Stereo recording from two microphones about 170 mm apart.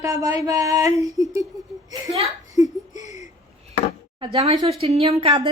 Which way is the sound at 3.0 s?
45° left (ahead or behind).